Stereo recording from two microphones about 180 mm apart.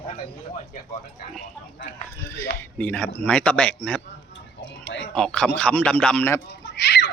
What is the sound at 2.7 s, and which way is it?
Speech, 10° left (ahead or behind).